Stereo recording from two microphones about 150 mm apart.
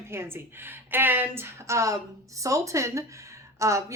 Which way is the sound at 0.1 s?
15° right (ahead or behind).